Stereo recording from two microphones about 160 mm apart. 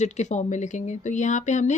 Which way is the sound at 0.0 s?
45° left (ahead or behind).